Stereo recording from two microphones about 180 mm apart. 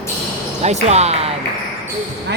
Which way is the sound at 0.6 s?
40° right (ahead or behind).